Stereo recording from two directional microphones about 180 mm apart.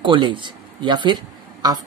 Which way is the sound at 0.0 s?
25° right (ahead or behind).